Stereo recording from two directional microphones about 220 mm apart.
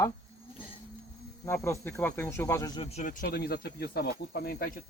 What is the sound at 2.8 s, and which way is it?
Speech, 30° left (ahead or behind).